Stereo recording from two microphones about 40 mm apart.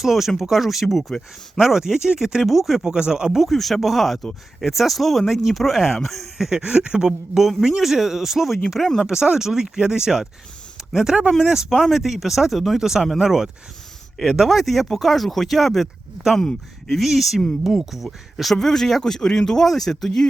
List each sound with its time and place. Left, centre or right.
0.0 s speech: centre
1.5 s speech: centre
2.8 s speech: centre
3.4 s speech: centre
6.3 s speech: centre
6.7 s speech: right
7.4 s speech: centre
9.0 s speech: centre
14.5 s speech: centre
18.5 s speech: centre